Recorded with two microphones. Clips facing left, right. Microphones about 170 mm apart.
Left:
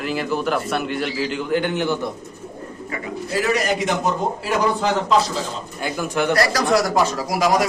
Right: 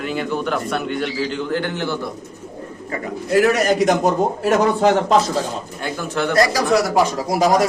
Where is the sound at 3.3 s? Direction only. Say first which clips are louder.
Right 6 dB; 55° right (ahead or behind).